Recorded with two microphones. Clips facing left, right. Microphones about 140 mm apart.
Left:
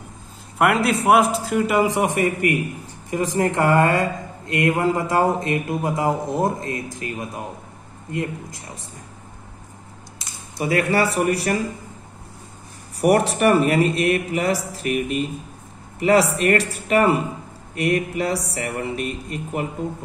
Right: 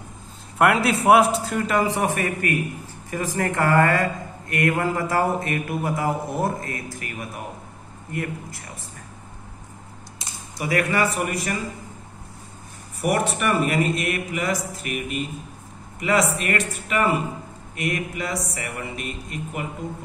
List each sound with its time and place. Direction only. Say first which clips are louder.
0.6 s a man's voice: left 1 dB; centre (ahead or behind); by 8.6 s 20° left (ahead or behind)
10.6 s a man's voice: left 3 dB; 30° left (ahead or behind)
13.0 s a man's voice: left 6 dB; 35° left (ahead or behind)